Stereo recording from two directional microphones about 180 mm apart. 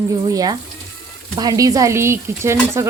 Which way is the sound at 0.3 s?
20° right (ahead or behind).